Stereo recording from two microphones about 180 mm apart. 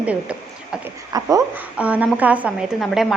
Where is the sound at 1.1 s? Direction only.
20° right (ahead or behind).